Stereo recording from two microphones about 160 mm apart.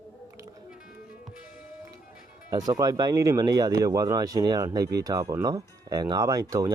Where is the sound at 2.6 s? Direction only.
25° right (ahead or behind).